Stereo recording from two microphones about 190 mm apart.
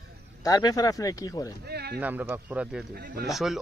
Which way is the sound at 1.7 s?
55° right (ahead or behind).